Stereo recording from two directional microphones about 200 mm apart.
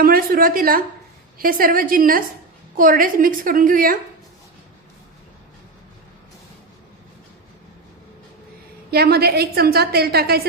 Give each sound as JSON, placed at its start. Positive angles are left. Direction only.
{"t": 0.0, "sound": "a woman's voice", "side_deg": -45}
{"t": 8.9, "sound": "a woman's voice", "side_deg": -50}